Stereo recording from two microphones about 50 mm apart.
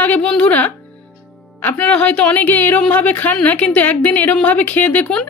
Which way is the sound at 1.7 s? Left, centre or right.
Left.